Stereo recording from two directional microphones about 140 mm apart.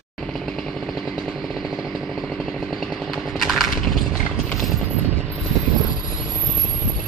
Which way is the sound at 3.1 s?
Centre (ahead or behind).